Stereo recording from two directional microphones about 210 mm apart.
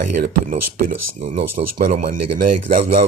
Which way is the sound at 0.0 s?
40° right (ahead or behind).